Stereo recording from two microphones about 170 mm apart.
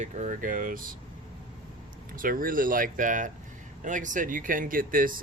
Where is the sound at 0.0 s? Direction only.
45° right (ahead or behind).